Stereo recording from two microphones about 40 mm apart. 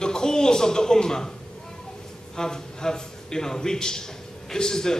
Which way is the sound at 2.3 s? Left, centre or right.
Centre.